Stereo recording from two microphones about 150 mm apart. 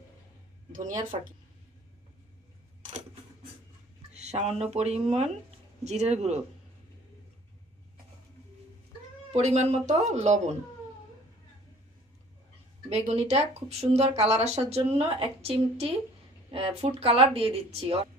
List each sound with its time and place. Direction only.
0.7 s speech: 60° right (ahead or behind)
4.1 s speech: 45° right (ahead or behind)
9.3 s speech: 50° right (ahead or behind)
12.9 s speech: 45° right (ahead or behind)